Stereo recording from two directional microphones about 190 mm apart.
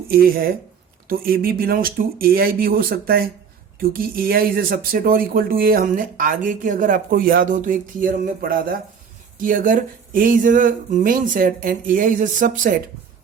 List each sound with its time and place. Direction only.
0.1 s speech: 50° right (ahead or behind)